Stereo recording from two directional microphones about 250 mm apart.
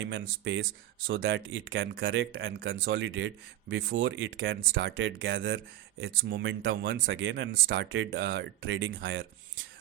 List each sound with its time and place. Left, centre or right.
0.0 s speech: right